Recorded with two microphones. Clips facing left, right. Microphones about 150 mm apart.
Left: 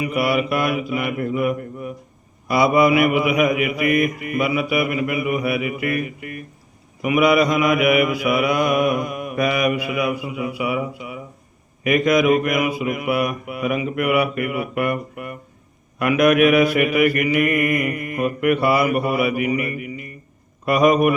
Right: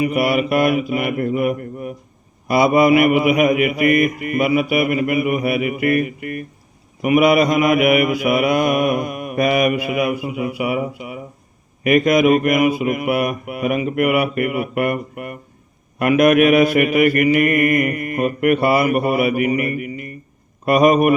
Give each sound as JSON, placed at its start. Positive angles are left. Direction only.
{"t": 0.0, "sound": "mantra", "side_deg": -55}
{"t": 2.8, "sound": "speech", "side_deg": -55}
{"t": 7.0, "sound": "mantra", "side_deg": -50}
{"t": 11.9, "sound": "mantra", "side_deg": -55}
{"t": 16.2, "sound": "mantra", "side_deg": -35}
{"t": 19.5, "sound": "a man's voice", "side_deg": -55}